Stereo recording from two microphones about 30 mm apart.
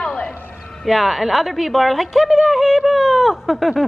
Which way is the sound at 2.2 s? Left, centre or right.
Centre.